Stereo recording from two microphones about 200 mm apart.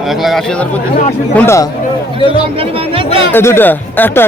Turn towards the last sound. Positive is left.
turn(degrees=10)  # may be behind; listen again after turning